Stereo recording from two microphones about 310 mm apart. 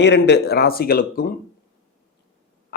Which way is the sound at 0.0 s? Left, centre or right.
Left.